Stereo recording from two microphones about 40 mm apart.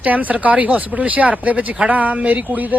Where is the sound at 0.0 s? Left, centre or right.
Right.